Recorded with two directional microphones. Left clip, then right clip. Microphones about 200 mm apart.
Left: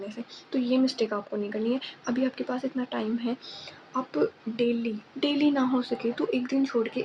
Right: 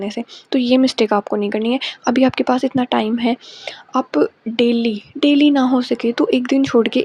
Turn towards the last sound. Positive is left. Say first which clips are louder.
# right 12 dB
turn(degrees=-45)  # may be behind; listen again after turning